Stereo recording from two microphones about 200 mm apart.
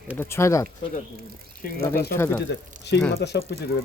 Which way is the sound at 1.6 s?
50° left (ahead or behind).